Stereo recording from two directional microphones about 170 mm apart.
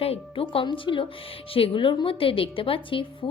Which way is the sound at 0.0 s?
35° left (ahead or behind).